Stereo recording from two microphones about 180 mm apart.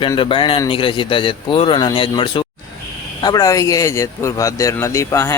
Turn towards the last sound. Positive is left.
turn(degrees=15)  # may be behind; listen again after turning